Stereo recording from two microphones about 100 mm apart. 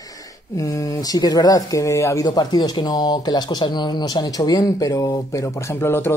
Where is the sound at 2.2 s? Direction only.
45° left (ahead or behind).